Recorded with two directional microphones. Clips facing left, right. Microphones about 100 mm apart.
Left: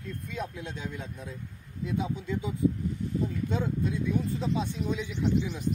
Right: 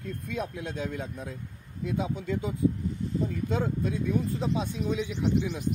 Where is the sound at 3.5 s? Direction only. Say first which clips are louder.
Right 1 dB; 55° right (ahead or behind).